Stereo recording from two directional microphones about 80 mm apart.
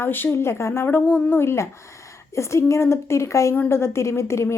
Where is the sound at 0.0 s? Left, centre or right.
Left.